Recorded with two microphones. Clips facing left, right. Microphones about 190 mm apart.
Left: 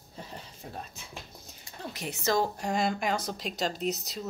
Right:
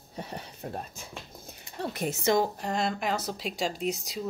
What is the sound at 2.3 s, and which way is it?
Speech, 20° right (ahead or behind).